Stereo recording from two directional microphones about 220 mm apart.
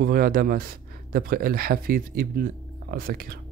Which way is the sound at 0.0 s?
40° right (ahead or behind).